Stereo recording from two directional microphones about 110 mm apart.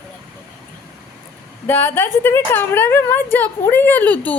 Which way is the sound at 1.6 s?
20° left (ahead or behind).